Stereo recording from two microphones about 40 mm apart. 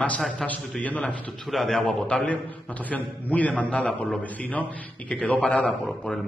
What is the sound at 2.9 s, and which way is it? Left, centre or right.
A man's voice, left.